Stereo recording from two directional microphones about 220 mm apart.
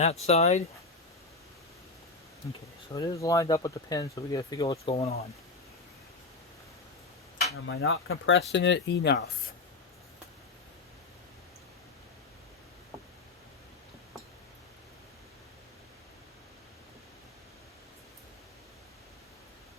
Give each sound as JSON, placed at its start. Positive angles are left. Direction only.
{"t": 0.0, "sound": "speech", "side_deg": 30}
{"t": 2.9, "sound": "speech", "side_deg": 15}
{"t": 4.9, "sound": "speech", "side_deg": 25}
{"t": 7.7, "sound": "speech", "side_deg": 65}